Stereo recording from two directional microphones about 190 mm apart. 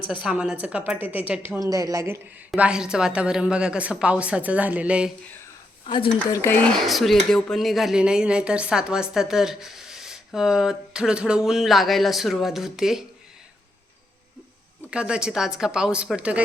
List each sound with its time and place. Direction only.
0.0 s a woman's voice: 25° left (ahead or behind)
0.3 s a woman's voice: 5° right (ahead or behind)
6.2 s a woman's voice: 15° left (ahead or behind); by 13.1 s centre (ahead or behind)
14.8 s a woman's voice: 5° right (ahead or behind)